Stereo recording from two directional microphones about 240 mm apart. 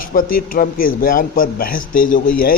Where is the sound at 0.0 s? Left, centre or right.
Left.